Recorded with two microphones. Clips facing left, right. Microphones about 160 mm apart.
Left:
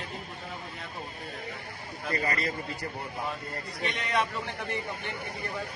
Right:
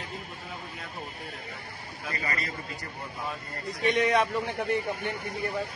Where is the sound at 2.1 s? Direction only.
35° left (ahead or behind).